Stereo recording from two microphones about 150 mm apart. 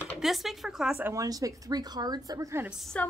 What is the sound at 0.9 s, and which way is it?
A woman's voice, 20° right (ahead or behind).